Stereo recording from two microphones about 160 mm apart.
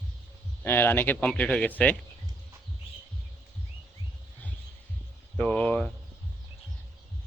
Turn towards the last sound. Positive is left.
turn(degrees=10)  # may be behind; listen again after turning